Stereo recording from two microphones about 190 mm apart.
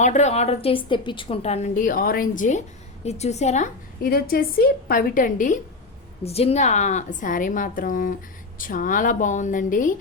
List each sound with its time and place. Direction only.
0.0 s a woman's voice: 40° left (ahead or behind)
4.0 s a woman's voice: 50° left (ahead or behind)
6.2 s a woman's voice: 30° left (ahead or behind)